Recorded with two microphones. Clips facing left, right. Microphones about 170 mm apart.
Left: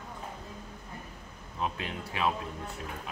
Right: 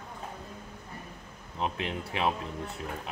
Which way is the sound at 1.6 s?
20° right (ahead or behind).